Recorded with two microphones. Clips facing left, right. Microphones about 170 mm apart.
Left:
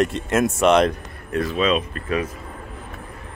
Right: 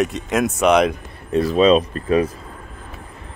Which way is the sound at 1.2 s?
30° right (ahead or behind).